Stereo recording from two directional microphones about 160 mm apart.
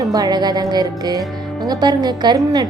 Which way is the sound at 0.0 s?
20° right (ahead or behind).